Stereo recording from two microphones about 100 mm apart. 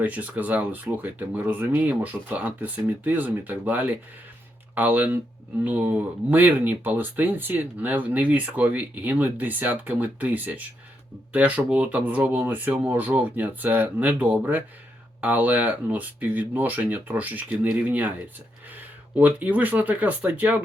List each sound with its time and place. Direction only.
0.0 s speech: 15° right (ahead or behind)
19.2 s speech: 15° right (ahead or behind)